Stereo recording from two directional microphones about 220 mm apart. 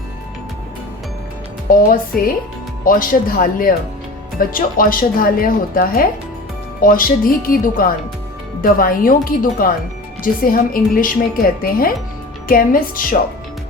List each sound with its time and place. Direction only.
1.7 s a woman's voice: 40° left (ahead or behind)